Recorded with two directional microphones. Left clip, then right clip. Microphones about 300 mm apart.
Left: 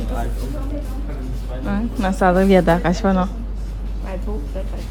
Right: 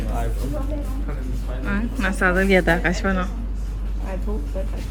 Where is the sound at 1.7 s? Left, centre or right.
Centre.